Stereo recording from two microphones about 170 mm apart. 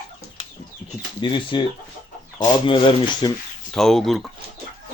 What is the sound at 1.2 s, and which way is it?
Speech, 30° left (ahead or behind).